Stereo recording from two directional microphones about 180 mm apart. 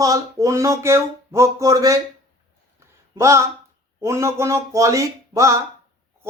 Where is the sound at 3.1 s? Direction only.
15° right (ahead or behind).